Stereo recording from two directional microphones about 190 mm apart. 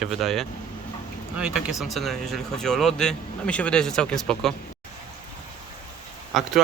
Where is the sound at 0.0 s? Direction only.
Centre (ahead or behind).